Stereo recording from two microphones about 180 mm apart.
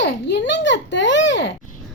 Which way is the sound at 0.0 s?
75° left (ahead or behind).